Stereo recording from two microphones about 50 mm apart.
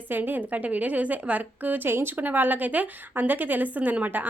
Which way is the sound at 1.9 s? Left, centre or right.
Right.